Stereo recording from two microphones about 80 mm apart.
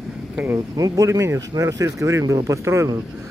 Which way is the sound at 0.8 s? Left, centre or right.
Right.